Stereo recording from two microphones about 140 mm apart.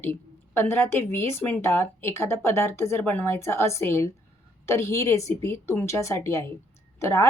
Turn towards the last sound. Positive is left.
turn(degrees=20)  # may be behind; listen again after turning